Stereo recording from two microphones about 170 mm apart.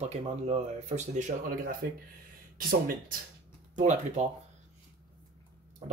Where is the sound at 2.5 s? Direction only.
60° right (ahead or behind).